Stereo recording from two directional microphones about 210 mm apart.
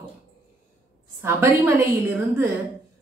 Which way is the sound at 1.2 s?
10° right (ahead or behind).